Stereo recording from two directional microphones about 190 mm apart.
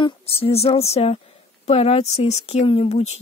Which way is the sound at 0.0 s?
30° left (ahead or behind).